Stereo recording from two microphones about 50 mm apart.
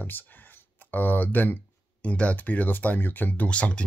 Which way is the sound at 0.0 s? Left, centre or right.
Left.